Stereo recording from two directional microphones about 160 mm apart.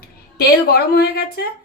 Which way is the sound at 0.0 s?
75° left (ahead or behind).